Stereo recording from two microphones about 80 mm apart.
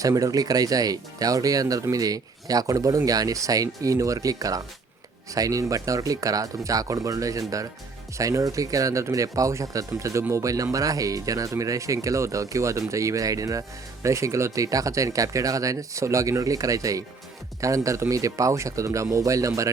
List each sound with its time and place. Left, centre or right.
0.0 s speech: right